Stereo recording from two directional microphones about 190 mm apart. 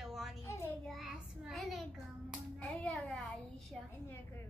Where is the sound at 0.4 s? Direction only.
15° left (ahead or behind).